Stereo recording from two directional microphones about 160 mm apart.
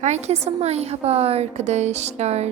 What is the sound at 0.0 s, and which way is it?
A woman's voice, 45° right (ahead or behind).